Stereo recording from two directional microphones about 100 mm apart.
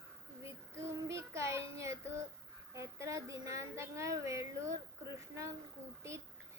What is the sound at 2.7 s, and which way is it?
Speech, 30° right (ahead or behind).